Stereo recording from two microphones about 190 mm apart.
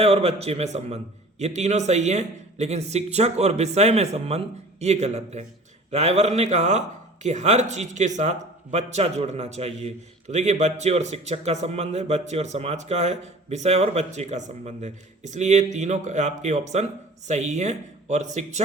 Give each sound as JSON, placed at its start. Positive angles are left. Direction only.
{"t": 0.0, "sound": "speech", "side_deg": -30}